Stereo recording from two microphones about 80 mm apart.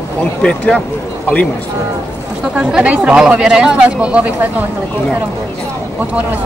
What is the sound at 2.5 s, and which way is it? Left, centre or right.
Speech, centre.